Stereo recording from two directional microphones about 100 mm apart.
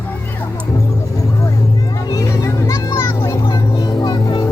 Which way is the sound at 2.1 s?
35° left (ahead or behind).